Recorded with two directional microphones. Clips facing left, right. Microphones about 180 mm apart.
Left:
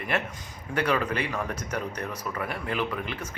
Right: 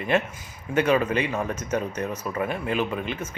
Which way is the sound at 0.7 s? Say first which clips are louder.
Right 5 dB; 20° right (ahead or behind).